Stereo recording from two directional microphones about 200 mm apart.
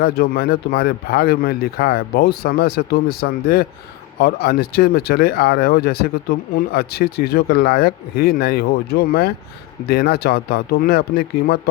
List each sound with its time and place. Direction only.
0.0 s speech: 50° left (ahead or behind)